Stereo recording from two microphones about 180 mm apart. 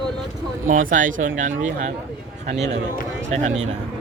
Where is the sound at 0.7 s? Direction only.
45° right (ahead or behind).